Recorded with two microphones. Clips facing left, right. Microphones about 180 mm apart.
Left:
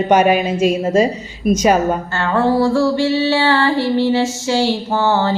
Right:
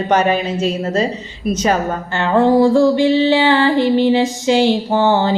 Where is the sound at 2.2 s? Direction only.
15° right (ahead or behind).